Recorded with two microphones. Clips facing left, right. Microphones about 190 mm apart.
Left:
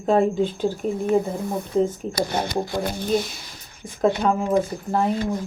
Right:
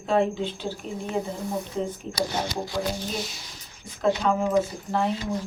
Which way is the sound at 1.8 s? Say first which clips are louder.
Left 5 dB; 55° left (ahead or behind).